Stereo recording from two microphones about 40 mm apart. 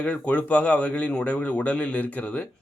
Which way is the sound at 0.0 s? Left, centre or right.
Left.